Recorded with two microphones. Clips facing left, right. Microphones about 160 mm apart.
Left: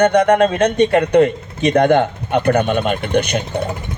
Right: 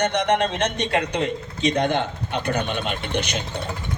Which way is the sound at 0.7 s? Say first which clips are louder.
Left 11 dB; 55° left (ahead or behind).